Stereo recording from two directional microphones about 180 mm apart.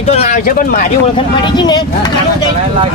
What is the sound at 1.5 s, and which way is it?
Speech, 25° left (ahead or behind).